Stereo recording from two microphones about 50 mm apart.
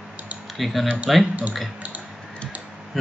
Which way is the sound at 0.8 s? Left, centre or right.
Right.